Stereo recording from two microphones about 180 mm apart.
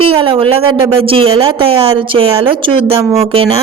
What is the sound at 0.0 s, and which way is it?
A woman's voice, 30° right (ahead or behind).